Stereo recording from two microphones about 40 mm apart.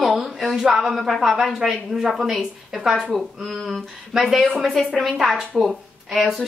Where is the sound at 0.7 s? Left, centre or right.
Centre.